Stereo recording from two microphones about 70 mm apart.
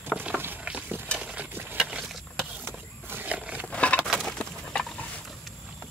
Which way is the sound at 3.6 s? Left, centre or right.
Centre.